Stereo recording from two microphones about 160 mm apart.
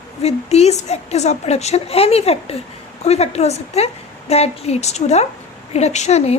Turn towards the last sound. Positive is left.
turn(degrees=40)  # may be behind; listen again after turning